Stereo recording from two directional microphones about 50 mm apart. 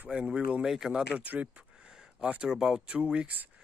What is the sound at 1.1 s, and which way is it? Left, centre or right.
Speech, right.